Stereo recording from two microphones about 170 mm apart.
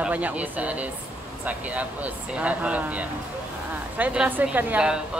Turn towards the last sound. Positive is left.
turn(degrees=-5)  # may be behind; listen again after turning